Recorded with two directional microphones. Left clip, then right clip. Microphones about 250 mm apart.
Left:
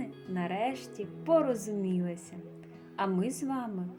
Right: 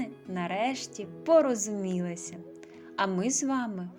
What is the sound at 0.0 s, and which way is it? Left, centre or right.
Speech, centre.